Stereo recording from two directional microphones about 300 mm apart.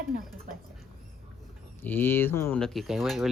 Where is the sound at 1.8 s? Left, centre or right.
Centre.